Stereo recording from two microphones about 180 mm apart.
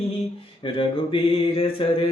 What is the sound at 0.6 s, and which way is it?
Speech, 30° left (ahead or behind).